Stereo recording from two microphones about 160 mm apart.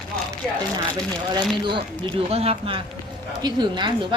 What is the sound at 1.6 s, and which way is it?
A woman's voice, 30° right (ahead or behind).